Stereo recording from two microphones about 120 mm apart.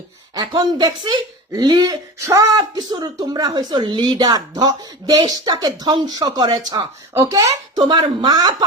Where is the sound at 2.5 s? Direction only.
35° right (ahead or behind).